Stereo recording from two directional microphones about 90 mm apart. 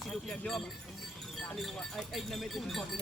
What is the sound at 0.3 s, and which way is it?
Speech, 5° left (ahead or behind).